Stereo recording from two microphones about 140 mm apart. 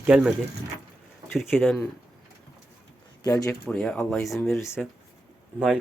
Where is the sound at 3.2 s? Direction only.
25° left (ahead or behind).